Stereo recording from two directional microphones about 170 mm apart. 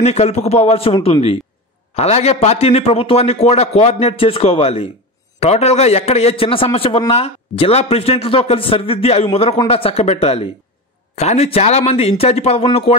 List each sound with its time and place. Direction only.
0.0 s a man's voice: 40° left (ahead or behind)